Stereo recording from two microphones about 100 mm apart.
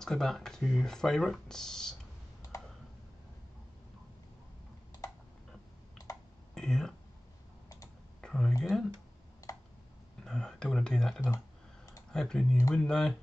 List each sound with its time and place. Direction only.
0.0 s speech: 5° left (ahead or behind)
6.1 s computer keyboard: 35° left (ahead or behind)
6.5 s a sound: 5° left (ahead or behind)
8.2 s a sound: 5° left (ahead or behind)
8.6 s speech: 5° left (ahead or behind)
10.2 s speech: 5° left (ahead or behind)
11.3 s clicking: 35° left (ahead or behind)
12.1 s speech: 5° left (ahead or behind)